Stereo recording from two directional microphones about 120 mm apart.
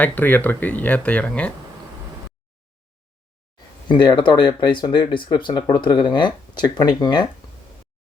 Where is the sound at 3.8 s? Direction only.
40° left (ahead or behind).